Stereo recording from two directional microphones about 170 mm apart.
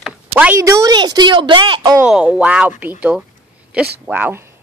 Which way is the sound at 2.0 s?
5° right (ahead or behind).